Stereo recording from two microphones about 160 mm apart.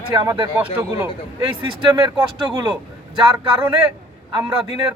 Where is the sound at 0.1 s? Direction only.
25° right (ahead or behind).